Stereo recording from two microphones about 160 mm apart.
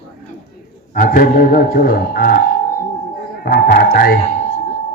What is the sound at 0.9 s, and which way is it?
Speech, 60° left (ahead or behind).